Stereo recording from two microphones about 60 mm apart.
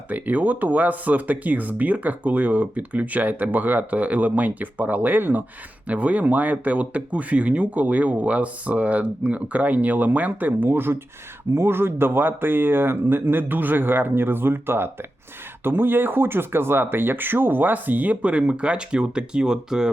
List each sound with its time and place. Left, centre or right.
0.1 s speech: right; by 19.9 s centre